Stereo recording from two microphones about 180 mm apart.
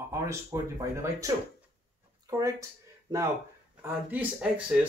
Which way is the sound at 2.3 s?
20° right (ahead or behind).